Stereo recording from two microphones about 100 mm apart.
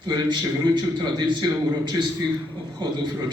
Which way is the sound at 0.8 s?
45° right (ahead or behind).